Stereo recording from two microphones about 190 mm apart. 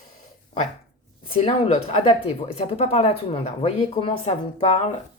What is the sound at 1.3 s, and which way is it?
Speech, 30° left (ahead or behind).